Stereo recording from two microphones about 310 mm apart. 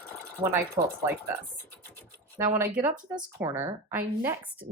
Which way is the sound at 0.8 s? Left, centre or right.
Right.